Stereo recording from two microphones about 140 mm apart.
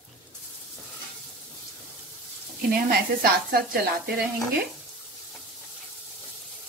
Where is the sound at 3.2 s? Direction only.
90° right.